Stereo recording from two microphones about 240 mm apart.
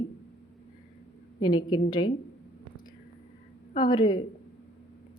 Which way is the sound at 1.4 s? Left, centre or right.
Centre.